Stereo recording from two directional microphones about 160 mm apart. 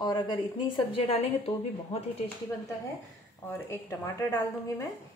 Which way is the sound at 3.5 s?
15° left (ahead or behind).